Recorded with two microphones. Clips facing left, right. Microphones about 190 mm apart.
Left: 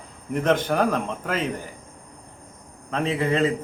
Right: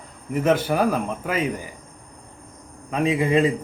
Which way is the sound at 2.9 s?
10° right (ahead or behind).